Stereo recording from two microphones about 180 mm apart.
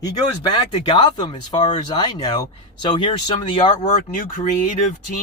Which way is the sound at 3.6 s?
45° left (ahead or behind).